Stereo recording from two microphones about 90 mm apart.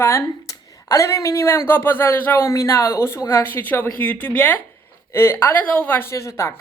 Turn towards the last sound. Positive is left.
turn(degrees=30)  # may be behind; listen again after turning